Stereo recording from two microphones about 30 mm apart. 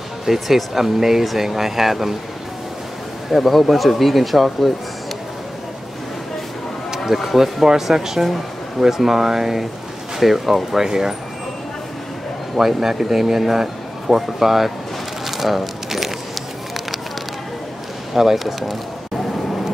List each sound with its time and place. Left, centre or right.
0.2 s speech: centre
3.3 s speech: centre
7.1 s speech: centre
7.8 s speech: centre
10.8 s speech: centre
12.5 s speech: centre
15.2 s a sound: centre
18.1 s speech: centre